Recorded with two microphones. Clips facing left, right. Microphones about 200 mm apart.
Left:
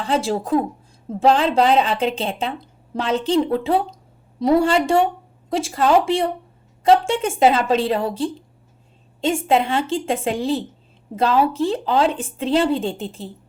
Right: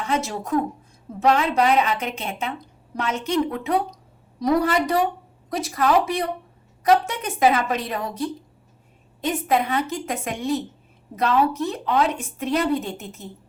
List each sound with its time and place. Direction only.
0.0 s a woman's voice: 30° left (ahead or behind)